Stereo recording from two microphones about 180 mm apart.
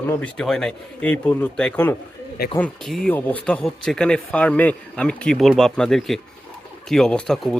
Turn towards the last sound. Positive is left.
turn(degrees=5)  # may be behind; listen again after turning